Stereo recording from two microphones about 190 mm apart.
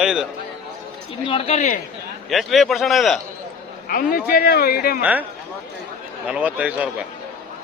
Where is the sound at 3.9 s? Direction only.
50° left (ahead or behind).